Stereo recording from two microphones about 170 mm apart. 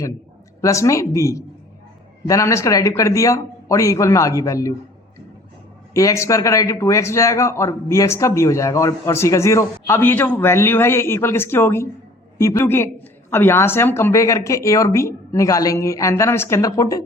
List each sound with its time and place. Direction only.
0.6 s a man's voice: 20° left (ahead or behind)
5.9 s a man's voice: 20° left (ahead or behind)